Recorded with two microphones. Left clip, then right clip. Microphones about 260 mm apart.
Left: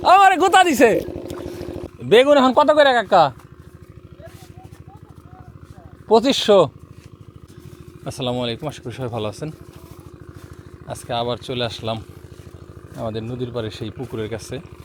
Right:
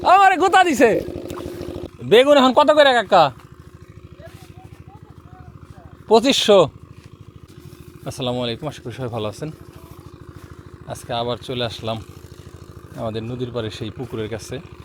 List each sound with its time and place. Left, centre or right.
0.0 s a sound: centre
1.0 s boat: centre
1.3 s boat: right
2.0 s speech: centre
6.1 s speech: centre
8.0 s speech: centre
10.8 s speech: centre
13.1 s speech: centre
13.9 s speech: centre
14.2 s speech: centre